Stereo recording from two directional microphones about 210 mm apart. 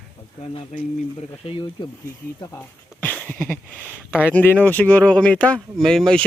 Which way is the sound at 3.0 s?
10° left (ahead or behind).